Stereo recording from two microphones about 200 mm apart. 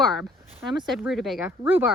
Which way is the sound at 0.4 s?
30° right (ahead or behind).